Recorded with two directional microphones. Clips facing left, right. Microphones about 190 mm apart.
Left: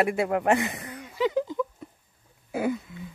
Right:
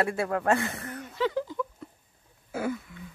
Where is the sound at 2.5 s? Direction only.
20° left (ahead or behind).